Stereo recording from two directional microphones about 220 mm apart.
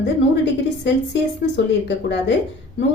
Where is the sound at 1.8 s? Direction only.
55° left (ahead or behind).